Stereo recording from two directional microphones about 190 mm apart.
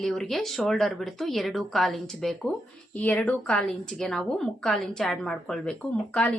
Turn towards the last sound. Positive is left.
turn(degrees=5)  # may be behind; listen again after turning